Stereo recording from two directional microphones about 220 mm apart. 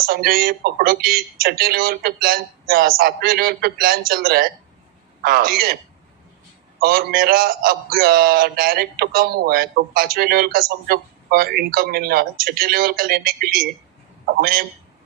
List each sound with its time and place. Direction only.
0.0 s a man's voice: 45° right (ahead or behind)
6.7 s a man's voice: 40° right (ahead or behind)